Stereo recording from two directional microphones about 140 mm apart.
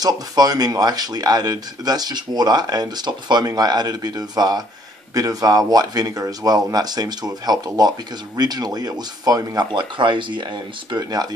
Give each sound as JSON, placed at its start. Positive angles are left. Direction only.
{"t": 0.0, "sound": "speech", "side_deg": -25}